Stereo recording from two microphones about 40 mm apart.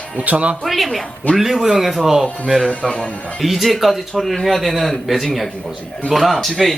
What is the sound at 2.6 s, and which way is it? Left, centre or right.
Speech, left.